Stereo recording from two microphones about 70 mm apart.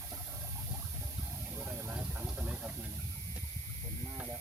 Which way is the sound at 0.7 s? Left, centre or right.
Right.